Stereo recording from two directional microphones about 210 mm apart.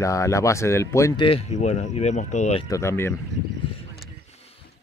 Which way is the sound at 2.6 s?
15° left (ahead or behind).